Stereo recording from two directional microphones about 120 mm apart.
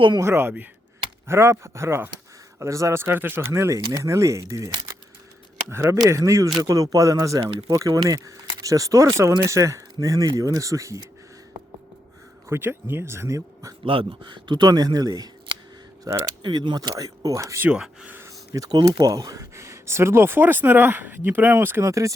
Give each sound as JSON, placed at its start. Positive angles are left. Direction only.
{"t": 0.2, "sound": "speech", "side_deg": -20}
{"t": 5.7, "sound": "speech", "side_deg": -30}
{"t": 12.5, "sound": "speech", "side_deg": -20}
{"t": 13.8, "sound": "speech", "side_deg": -45}
{"t": 16.4, "sound": "speech", "side_deg": -35}
{"t": 17.7, "sound": "speech", "side_deg": -5}
{"t": 18.2, "sound": "speech", "side_deg": -25}